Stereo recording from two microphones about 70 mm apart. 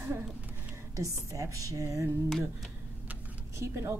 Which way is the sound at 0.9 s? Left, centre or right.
Right.